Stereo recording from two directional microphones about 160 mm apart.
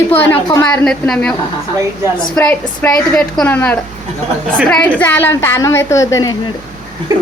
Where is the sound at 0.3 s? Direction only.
20° left (ahead or behind).